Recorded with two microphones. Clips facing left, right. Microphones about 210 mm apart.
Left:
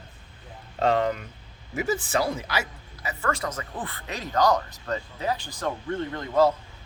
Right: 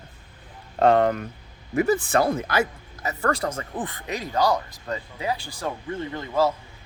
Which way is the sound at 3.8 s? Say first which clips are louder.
Right 4 dB; 15° right (ahead or behind).